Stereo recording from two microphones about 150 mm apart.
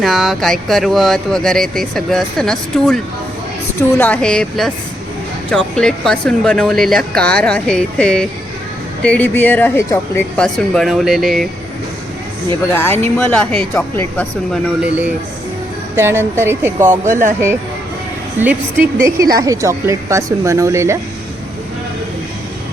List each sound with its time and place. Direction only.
0.0 s speech: centre (ahead or behind); by 10.4 s 15° left (ahead or behind)
10.4 s speech: 5° left (ahead or behind)
12.7 s speech: 15° left (ahead or behind)
14.5 s speech: 5° right (ahead or behind)
16.8 s speech: 60° right (ahead or behind)
18.3 s a woman's voice: 10° right (ahead or behind)